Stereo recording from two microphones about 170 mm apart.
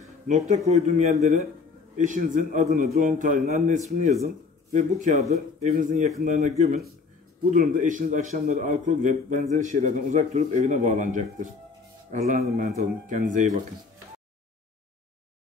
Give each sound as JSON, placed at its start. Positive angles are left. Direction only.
{"t": 0.3, "sound": "a man's voice", "side_deg": -40}
{"t": 7.5, "sound": "a man's voice", "side_deg": -50}